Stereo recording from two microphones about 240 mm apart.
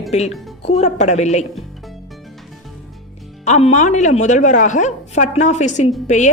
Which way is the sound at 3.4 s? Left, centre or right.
Left.